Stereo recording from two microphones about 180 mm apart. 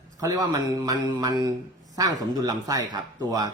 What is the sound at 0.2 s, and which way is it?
A man's voice, 20° right (ahead or behind).